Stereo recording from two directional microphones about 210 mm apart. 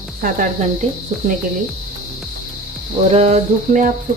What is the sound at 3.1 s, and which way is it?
Speech, 30° right (ahead or behind).